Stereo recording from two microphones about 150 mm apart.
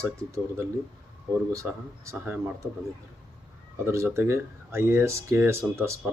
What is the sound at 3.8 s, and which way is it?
Speech, 20° right (ahead or behind).